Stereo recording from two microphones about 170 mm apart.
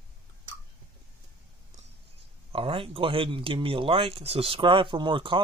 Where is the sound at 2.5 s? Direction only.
30° right (ahead or behind).